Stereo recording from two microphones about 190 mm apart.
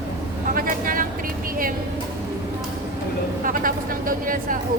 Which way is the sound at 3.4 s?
45° right (ahead or behind).